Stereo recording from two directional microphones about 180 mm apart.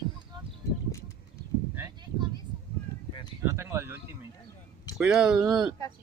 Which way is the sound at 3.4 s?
15° right (ahead or behind).